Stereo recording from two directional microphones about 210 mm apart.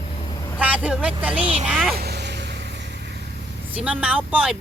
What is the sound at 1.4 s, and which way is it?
Speech, 25° right (ahead or behind).